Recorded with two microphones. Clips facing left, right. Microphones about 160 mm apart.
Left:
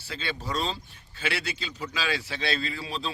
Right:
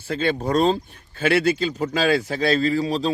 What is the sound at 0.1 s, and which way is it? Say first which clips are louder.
Speech: right 11 dB; 50° right (ahead or behind).